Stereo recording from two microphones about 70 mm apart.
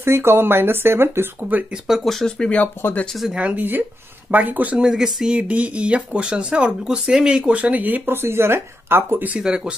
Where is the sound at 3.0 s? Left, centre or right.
Centre.